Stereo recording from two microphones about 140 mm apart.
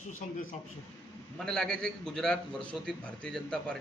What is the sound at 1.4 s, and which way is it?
A man's voice, 5° left (ahead or behind).